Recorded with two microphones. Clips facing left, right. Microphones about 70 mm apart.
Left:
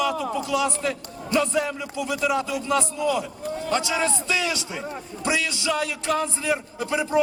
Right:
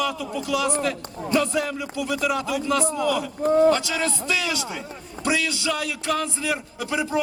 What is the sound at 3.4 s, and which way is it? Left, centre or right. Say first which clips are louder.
Speech: right 13 dB; right.